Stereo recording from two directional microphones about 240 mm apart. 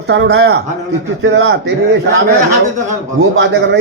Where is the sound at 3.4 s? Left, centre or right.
Right.